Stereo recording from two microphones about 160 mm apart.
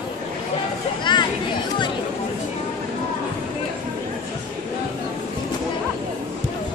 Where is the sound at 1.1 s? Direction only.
30° left (ahead or behind).